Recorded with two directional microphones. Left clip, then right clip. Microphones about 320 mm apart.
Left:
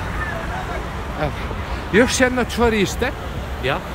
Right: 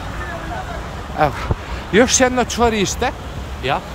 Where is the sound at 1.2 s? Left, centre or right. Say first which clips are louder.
Right 8 dB; centre.